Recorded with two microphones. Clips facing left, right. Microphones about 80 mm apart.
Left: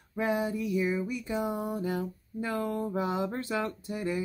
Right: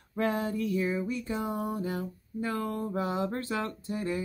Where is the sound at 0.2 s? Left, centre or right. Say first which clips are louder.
Even; centre.